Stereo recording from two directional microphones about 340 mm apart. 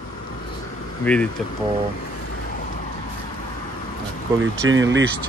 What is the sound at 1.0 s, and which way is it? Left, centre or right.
Speech, centre.